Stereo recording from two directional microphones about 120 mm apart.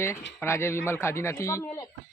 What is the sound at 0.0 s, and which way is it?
Speech, 20° left (ahead or behind).